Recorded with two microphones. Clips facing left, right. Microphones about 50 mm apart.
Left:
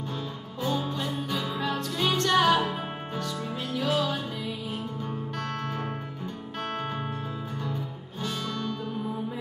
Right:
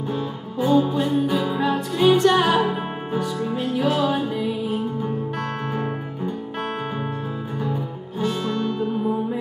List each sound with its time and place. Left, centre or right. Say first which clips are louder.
0.6 s music: right 11 dB; centre
7.6 s music: right 7 dB; centre